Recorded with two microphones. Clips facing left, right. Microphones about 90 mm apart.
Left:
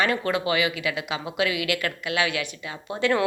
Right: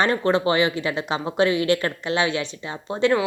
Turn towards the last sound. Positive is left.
turn(degrees=-20)  # may be behind; listen again after turning